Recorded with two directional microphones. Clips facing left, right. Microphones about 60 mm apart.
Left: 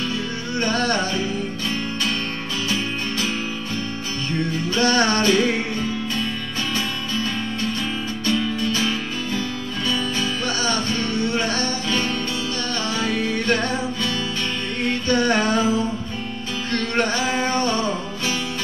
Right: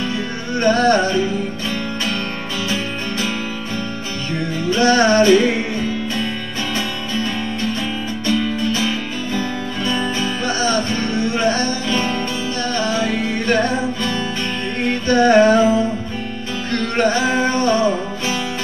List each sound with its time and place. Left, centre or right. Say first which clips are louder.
0.6 s music: right 7 dB; right
4.6 s music: right 6 dB; right
9.8 s music: right 3 dB; right